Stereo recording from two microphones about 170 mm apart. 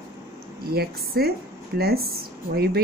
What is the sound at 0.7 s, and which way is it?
Speech, 65° right (ahead or behind).